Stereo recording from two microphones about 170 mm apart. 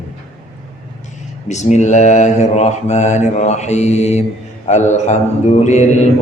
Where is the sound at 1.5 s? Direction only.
45° left (ahead or behind).